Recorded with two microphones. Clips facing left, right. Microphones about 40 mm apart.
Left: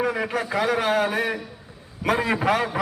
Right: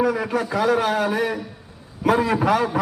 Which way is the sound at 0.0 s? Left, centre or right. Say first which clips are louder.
Right 3 dB; left.